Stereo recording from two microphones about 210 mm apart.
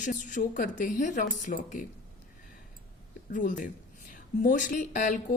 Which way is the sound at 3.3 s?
40° left (ahead or behind).